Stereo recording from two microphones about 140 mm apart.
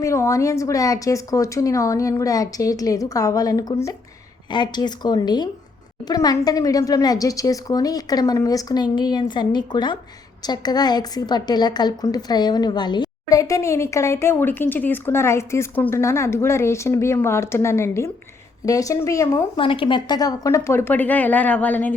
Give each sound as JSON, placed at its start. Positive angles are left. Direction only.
{"t": 0.0, "sound": "a woman's voice", "side_deg": 20}
{"t": 19.5, "sound": "a woman's voice", "side_deg": 40}